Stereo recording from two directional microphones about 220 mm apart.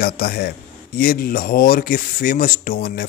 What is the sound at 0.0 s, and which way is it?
Speech, 45° left (ahead or behind).